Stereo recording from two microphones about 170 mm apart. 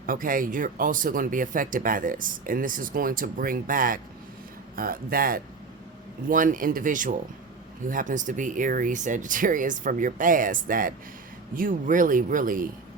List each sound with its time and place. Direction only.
0.0 s speech: 55° right (ahead or behind)